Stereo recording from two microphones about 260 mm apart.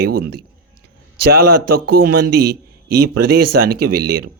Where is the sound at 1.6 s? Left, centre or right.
Right.